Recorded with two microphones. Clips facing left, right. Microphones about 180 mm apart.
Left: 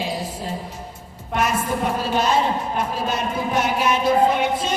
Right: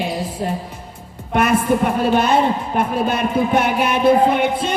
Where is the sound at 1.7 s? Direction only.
60° right (ahead or behind).